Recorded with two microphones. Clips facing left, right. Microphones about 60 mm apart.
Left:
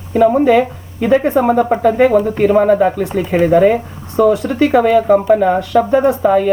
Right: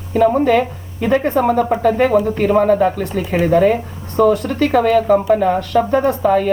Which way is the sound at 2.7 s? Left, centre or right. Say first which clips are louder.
Left 2 dB; centre.